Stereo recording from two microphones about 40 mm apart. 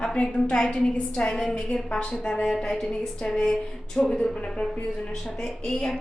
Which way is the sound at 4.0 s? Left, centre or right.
Centre.